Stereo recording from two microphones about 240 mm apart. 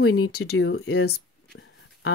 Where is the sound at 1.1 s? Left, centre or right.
Left.